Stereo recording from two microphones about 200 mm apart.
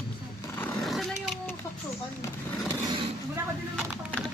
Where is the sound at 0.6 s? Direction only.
5° left (ahead or behind).